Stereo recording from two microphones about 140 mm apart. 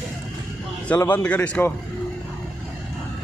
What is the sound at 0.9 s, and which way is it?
Speech, 15° left (ahead or behind).